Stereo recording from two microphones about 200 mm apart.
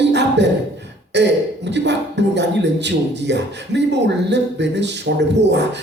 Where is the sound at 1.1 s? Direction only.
60° right (ahead or behind).